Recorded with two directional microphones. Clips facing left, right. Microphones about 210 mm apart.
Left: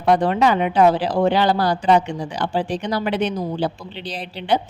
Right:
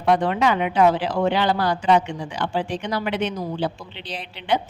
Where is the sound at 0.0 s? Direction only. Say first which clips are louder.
Left 3 dB; 40° left (ahead or behind).